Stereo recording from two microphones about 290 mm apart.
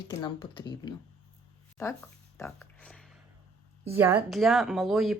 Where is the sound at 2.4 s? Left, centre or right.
Centre.